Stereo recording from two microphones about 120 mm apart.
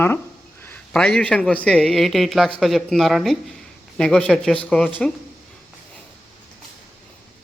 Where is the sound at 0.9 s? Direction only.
5° left (ahead or behind).